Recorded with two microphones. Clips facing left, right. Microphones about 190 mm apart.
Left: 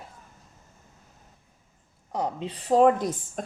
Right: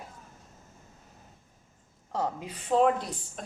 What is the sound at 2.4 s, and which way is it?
A woman's voice, 30° left (ahead or behind).